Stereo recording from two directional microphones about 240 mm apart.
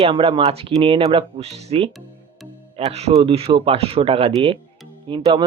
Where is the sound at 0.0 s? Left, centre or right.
Right.